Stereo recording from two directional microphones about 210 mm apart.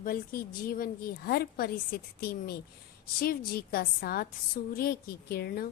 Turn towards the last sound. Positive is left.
turn(degrees=45)  # may be behind; listen again after turning